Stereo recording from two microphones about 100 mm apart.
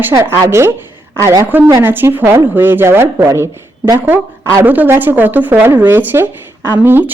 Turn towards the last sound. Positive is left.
turn(degrees=-20)  # may be behind; listen again after turning